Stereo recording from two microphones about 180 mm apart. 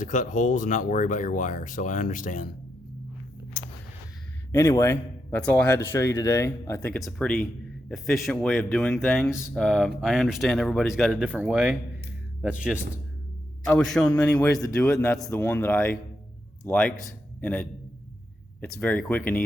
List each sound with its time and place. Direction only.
0.0 s speech: 45° left (ahead or behind)
3.6 s a sound: 50° left (ahead or behind)
4.5 s a man's voice: 15° left (ahead or behind); by 12.8 s 5° right (ahead or behind)
13.7 s speech: 5° left (ahead or behind)